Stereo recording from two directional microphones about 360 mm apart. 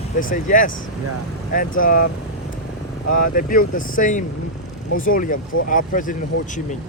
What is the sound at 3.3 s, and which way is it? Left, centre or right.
Speech, left.